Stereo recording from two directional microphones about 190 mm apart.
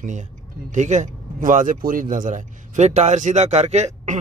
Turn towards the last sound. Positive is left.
turn(degrees=-40)  # may be behind; listen again after turning